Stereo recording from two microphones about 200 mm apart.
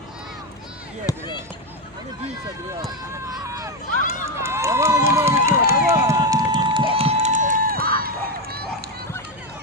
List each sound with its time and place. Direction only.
1.1 s speech: 20° left (ahead or behind)
3.4 s a sound: 15° right (ahead or behind)
4.4 s run: 15° right (ahead or behind); by 8.6 s 50° right (ahead or behind)